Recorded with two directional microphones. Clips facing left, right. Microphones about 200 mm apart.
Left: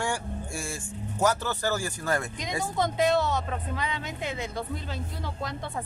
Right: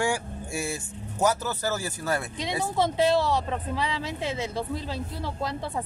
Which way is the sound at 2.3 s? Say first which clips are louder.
Right 3 dB; 30° right (ahead or behind).